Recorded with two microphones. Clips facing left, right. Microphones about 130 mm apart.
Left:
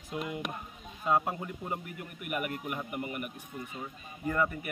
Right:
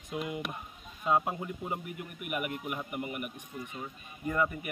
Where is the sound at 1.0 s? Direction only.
15° right (ahead or behind).